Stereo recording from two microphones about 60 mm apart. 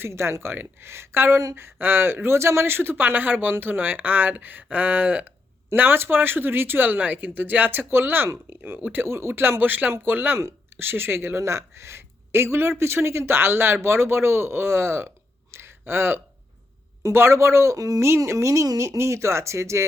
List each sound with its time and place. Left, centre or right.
0.0 s speech: right
15.5 s a sound: right
17.0 s speech: right
17.7 s speech: right
18.3 s speech: right